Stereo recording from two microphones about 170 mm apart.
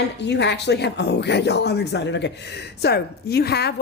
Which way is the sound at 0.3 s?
90° left.